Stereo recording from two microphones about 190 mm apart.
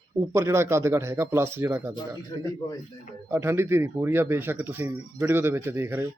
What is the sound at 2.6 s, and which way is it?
Speech, 20° left (ahead or behind).